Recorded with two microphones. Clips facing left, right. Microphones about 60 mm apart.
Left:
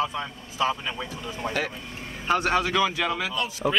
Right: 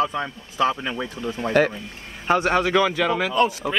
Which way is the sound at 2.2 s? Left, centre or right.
Right.